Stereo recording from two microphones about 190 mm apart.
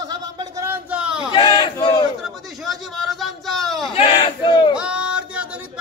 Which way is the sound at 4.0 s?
25° left (ahead or behind).